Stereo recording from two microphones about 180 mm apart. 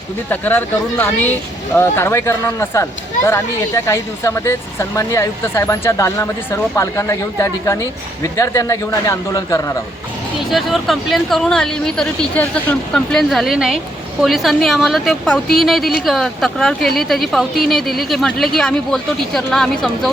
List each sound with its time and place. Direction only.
0.3 s speech: 10° left (ahead or behind)
10.5 s speech: centre (ahead or behind)